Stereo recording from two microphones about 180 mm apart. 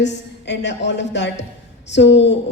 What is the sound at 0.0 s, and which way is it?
A woman's voice, 75° left (ahead or behind).